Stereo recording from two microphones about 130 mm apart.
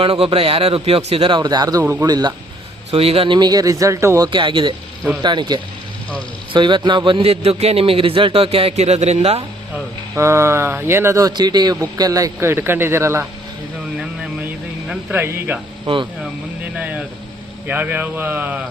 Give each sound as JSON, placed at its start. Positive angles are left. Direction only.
{"t": 0.0, "sound": "a man's voice", "side_deg": -45}
{"t": 1.8, "sound": "speech", "side_deg": -15}
{"t": 2.0, "sound": "speech", "side_deg": -30}
{"t": 2.9, "sound": "speech", "side_deg": -50}
{"t": 4.3, "sound": "a man's voice", "side_deg": -40}
{"t": 10.2, "sound": "speech", "side_deg": -20}
{"t": 15.1, "sound": "speech", "side_deg": -15}
{"t": 16.7, "sound": "vehicle", "side_deg": -10}
{"t": 17.7, "sound": "speech", "side_deg": -15}